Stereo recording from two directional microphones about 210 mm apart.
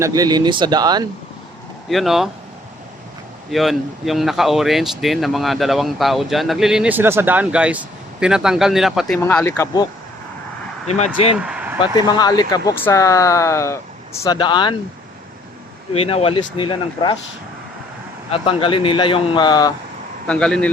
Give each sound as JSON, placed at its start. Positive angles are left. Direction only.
{"t": 0.0, "sound": "speech", "side_deg": -15}
{"t": 1.9, "sound": "speech", "side_deg": 0}
{"t": 3.5, "sound": "speech", "side_deg": 0}
{"t": 10.8, "sound": "speech", "side_deg": 35}
{"t": 11.3, "sound": "vehicle", "side_deg": -5}
{"t": 11.9, "sound": "speech", "side_deg": 20}
{"t": 14.1, "sound": "speech", "side_deg": 25}
{"t": 15.9, "sound": "speech", "side_deg": 30}
{"t": 18.3, "sound": "speech", "side_deg": 25}
{"t": 20.2, "sound": "speech", "side_deg": 5}